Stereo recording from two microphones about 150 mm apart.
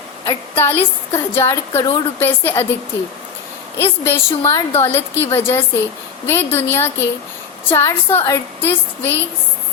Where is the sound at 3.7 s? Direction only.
15° left (ahead or behind).